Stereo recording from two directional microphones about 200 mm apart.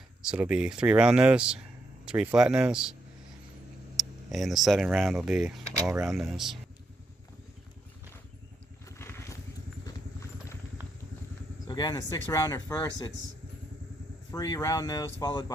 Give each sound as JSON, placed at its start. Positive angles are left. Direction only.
{"t": 0.2, "sound": "speech", "side_deg": -5}
{"t": 3.9, "sound": "speech", "side_deg": 0}
{"t": 9.0, "sound": "vehicle", "side_deg": 15}
{"t": 11.7, "sound": "speech", "side_deg": 20}
{"t": 14.3, "sound": "speech", "side_deg": 15}